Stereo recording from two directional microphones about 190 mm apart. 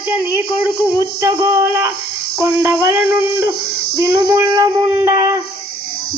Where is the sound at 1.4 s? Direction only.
15° right (ahead or behind).